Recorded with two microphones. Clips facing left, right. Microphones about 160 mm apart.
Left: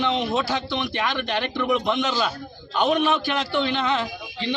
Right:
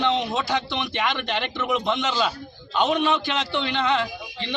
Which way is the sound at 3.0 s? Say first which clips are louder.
Left 1 dB; 20° right (ahead or behind).